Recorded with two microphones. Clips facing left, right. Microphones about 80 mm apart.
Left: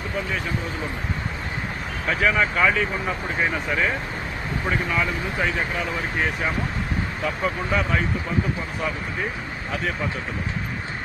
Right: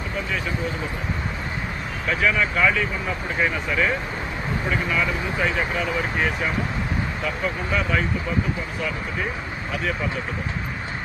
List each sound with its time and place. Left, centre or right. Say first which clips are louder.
2.2 s speech: left 1 dB; left
7.4 s speech: left 1 dB; left